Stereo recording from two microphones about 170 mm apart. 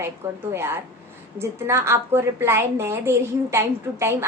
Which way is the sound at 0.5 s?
15° right (ahead or behind).